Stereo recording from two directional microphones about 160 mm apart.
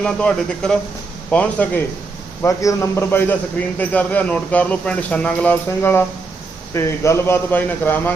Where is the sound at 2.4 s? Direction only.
20° left (ahead or behind).